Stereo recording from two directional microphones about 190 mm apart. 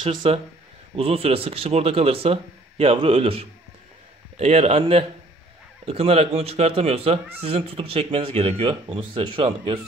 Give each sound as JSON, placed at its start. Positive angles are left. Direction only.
{"t": 0.0, "sound": "a man's voice", "side_deg": -30}